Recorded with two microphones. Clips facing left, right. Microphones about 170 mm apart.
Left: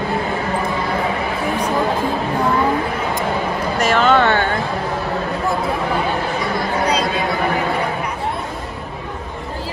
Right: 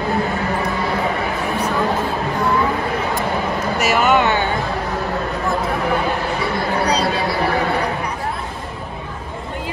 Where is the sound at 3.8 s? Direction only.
10° right (ahead or behind).